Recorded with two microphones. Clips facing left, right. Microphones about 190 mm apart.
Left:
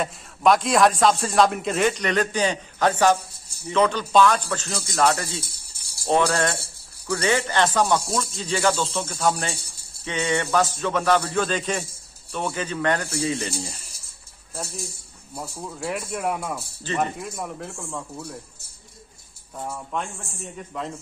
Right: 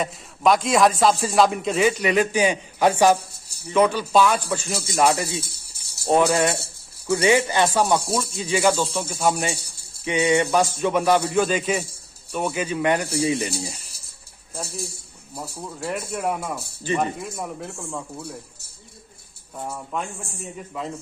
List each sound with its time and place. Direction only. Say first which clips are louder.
0.0 s a man's voice: even; centre (ahead or behind)
15.3 s a man's voice: even; centre (ahead or behind)
16.8 s speech: right 2 dB; 15° right (ahead or behind)
17.2 s a man's voice: right 1 dB; centre (ahead or behind)
19.5 s a man's voice: even; 5° right (ahead or behind)